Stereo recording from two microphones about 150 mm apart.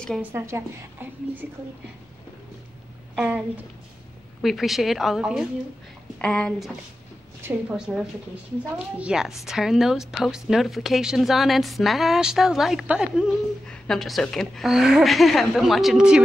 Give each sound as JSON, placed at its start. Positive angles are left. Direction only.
{"t": 0.2, "sound": "a woman's voice", "side_deg": -15}
{"t": 3.2, "sound": "a woman's voice", "side_deg": -10}
{"t": 7.7, "sound": "a woman's voice", "side_deg": -5}